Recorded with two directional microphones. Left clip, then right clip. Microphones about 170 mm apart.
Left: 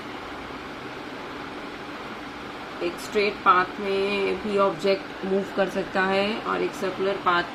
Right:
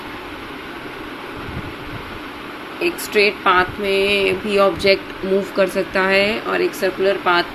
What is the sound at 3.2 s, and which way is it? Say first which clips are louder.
Speech: right 5 dB; 25° right (ahead or behind).